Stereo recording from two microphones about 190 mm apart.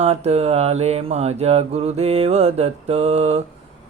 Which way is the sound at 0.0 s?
35° right (ahead or behind).